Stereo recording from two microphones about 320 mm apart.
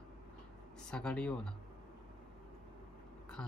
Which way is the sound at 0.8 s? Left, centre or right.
Centre.